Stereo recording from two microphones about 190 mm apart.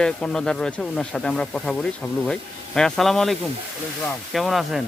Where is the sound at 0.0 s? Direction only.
5° left (ahead or behind).